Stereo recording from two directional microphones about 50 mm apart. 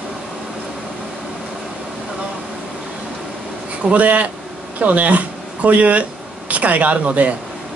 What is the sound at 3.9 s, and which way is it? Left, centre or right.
Speech, right.